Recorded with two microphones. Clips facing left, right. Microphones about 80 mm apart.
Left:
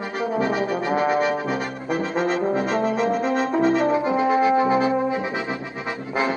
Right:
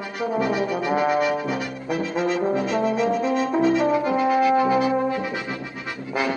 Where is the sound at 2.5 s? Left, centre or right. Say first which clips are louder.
Even; left.